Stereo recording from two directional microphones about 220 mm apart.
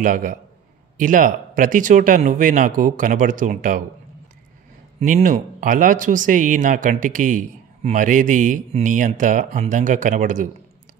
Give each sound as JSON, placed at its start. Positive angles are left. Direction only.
{"t": 0.0, "sound": "speech", "side_deg": -40}
{"t": 5.0, "sound": "speech", "side_deg": -35}